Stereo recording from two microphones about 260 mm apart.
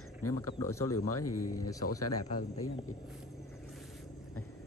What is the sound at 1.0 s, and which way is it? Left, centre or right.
Speech, left.